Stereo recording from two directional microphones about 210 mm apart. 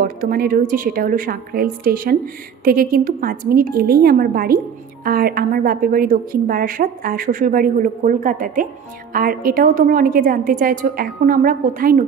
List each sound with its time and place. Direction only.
0.0 s a woman's voice: 45° right (ahead or behind)